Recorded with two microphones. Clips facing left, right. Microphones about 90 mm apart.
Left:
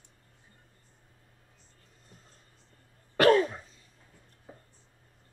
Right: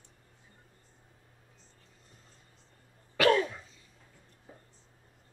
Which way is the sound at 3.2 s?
40° left (ahead or behind).